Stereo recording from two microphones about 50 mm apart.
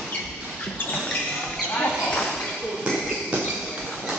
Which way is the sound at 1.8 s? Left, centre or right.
Left.